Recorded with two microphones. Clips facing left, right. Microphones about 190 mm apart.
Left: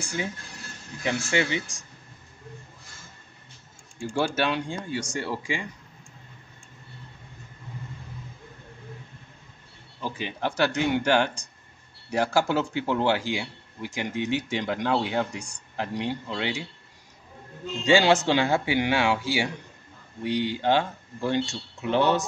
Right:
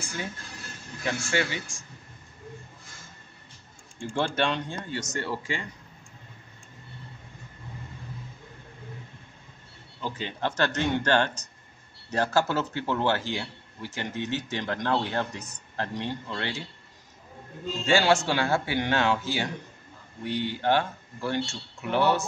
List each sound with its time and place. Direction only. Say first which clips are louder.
0.0 s a man's voice: left 4 dB; 15° left (ahead or behind)
4.0 s a man's voice: left 1 dB; 5° left (ahead or behind)
10.0 s a man's voice: left 1 dB; 10° left (ahead or behind)
17.8 s a man's voice: left 3 dB; 15° left (ahead or behind)